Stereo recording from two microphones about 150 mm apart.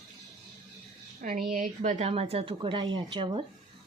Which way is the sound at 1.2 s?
65° right (ahead or behind).